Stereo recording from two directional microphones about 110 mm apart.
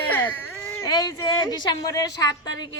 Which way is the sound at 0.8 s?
35° left (ahead or behind).